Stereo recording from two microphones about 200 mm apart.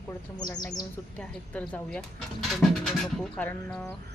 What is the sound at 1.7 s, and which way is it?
Speech, 5° left (ahead or behind).